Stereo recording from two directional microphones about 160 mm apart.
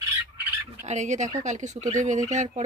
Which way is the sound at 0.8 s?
45° right (ahead or behind).